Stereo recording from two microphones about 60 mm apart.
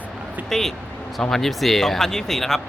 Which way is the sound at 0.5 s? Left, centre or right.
Centre.